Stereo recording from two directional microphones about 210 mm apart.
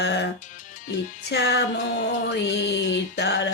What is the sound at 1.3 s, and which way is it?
Music, 55° left (ahead or behind).